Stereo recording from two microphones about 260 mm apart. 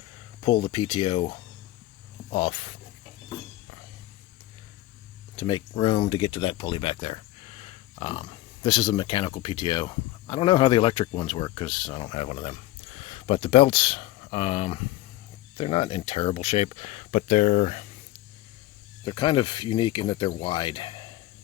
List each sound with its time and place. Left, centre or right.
0.4 s speech: centre
5.4 s speech: centre
19.0 s speech: centre